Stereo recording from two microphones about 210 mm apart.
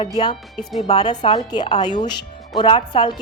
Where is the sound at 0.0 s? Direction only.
20° left (ahead or behind).